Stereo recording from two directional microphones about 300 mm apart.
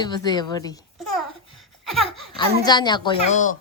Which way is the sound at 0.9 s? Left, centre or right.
Centre.